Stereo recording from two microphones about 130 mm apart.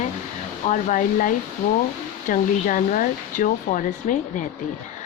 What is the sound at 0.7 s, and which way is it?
Speech, 90° left.